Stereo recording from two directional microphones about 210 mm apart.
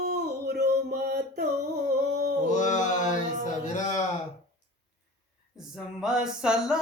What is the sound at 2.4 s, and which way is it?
Mantra, 35° left (ahead or behind).